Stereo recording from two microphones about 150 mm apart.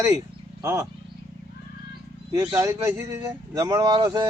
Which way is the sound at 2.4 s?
20° right (ahead or behind).